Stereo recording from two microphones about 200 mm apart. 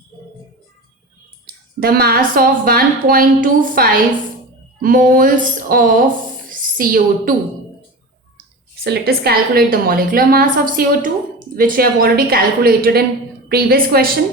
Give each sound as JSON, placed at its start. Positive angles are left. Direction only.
{"t": 1.8, "sound": "a woman's voice", "side_deg": -50}
{"t": 8.8, "sound": "a woman's voice", "side_deg": -55}